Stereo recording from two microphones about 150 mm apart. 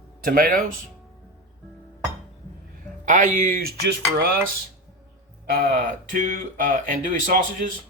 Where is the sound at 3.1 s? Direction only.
60° right (ahead or behind); by 3.9 s 90° right.